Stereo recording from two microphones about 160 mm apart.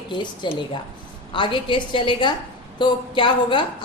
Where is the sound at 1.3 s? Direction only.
30° left (ahead or behind).